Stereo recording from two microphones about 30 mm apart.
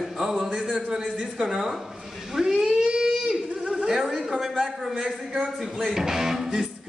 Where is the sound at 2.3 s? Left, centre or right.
Centre.